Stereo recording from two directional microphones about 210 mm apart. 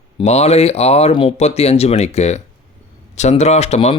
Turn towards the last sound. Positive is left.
turn(degrees=30)  # may be behind; listen again after turning